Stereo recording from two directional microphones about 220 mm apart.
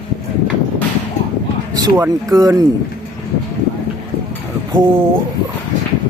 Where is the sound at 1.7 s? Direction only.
15° right (ahead or behind).